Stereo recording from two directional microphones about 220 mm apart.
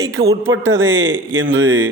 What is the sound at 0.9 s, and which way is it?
Speech, 60° right (ahead or behind).